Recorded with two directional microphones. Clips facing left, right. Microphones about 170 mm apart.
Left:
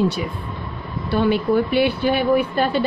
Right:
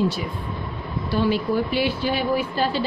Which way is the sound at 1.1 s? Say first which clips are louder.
Left 4 dB; 60° left (ahead or behind).